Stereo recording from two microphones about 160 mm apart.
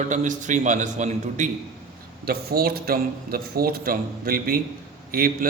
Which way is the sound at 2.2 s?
75° right (ahead or behind).